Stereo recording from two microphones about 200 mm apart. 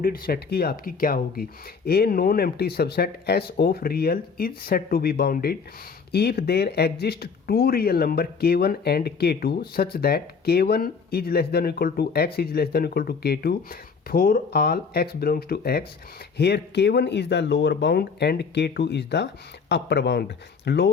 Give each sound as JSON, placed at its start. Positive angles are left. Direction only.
{"t": 0.0, "sound": "speech", "side_deg": 45}